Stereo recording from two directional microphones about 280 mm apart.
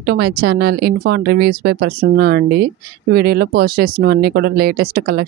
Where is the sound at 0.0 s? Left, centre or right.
Right.